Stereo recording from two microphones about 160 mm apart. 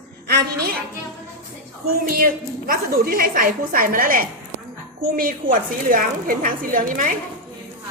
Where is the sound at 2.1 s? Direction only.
65° right (ahead or behind).